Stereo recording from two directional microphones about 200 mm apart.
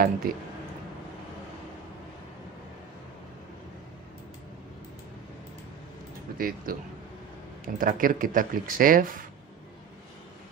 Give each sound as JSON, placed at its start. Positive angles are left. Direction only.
{"t": 0.2, "sound": "speech", "side_deg": -45}
{"t": 6.3, "sound": "speech", "side_deg": -45}